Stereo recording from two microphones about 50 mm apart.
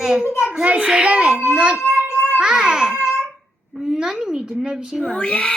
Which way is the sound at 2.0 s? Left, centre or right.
Left.